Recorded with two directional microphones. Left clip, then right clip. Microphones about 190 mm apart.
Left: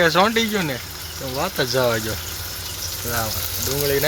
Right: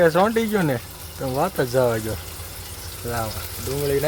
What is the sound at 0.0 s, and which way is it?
Speech, 20° right (ahead or behind).